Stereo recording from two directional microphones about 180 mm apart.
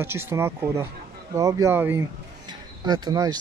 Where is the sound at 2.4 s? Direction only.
20° right (ahead or behind).